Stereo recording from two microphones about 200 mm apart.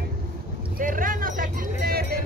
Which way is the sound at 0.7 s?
45° right (ahead or behind).